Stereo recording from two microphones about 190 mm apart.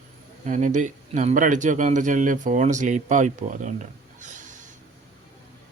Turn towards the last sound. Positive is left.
turn(degrees=-40)  # may be behind; listen again after turning